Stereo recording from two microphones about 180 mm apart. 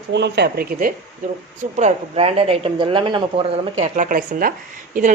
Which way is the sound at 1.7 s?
40° right (ahead or behind).